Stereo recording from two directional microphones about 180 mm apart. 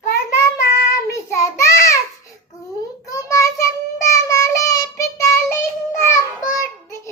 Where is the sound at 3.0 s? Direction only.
15° left (ahead or behind).